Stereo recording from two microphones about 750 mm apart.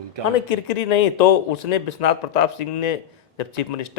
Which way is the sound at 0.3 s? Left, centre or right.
Left.